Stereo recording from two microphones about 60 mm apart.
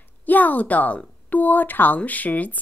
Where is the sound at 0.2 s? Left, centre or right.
Left.